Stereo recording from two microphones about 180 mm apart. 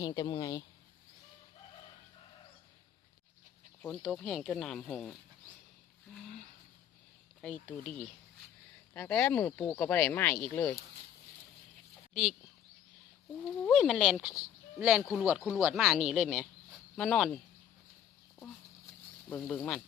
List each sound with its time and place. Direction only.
0.0 s speech: 25° left (ahead or behind)
3.8 s speech: 5° left (ahead or behind)
7.4 s speech: 5° left (ahead or behind)
12.1 s speech: 5° right (ahead or behind)
13.7 s speech: centre (ahead or behind)
19.3 s speech: 5° left (ahead or behind)